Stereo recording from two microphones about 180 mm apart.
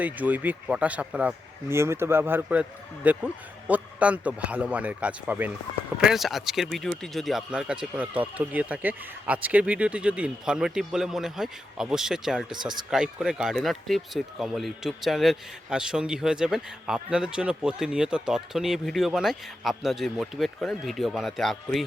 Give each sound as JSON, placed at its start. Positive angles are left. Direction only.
{"t": 0.0, "sound": "speech", "side_deg": -10}